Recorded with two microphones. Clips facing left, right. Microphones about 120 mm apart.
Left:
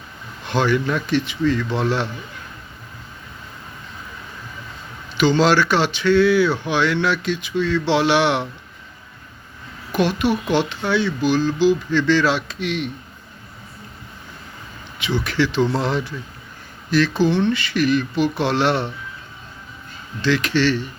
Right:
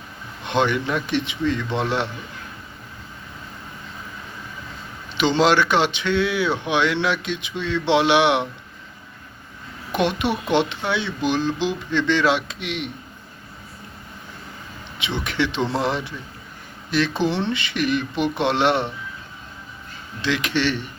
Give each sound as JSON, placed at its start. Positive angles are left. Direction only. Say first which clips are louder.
{"t": 0.4, "sound": "speech", "louder": "left 2 dB", "side_deg": -20}
{"t": 5.1, "sound": "speech", "louder": "left 2 dB", "side_deg": -20}
{"t": 9.9, "sound": "speech", "louder": "left 2 dB", "side_deg": -20}
{"t": 14.9, "sound": "speech", "louder": "left 3 dB", "side_deg": -20}
{"t": 20.2, "sound": "speech", "louder": "left 4 dB", "side_deg": -20}